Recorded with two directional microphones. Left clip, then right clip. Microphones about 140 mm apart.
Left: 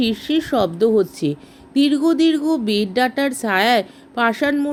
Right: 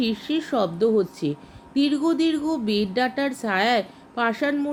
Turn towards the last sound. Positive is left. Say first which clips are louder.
# left 5 dB
turn(degrees=45)  # may be behind; listen again after turning